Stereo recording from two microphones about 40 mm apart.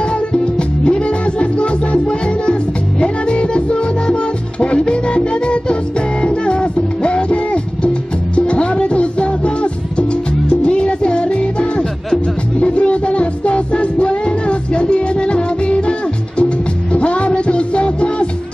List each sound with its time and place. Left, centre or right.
0.3 s music: left